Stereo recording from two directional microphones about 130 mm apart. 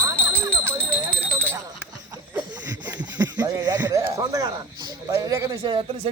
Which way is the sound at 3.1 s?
30° right (ahead or behind).